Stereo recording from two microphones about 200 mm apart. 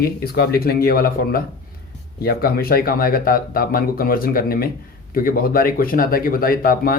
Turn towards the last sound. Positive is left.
turn(degrees=45)  # may be behind; listen again after turning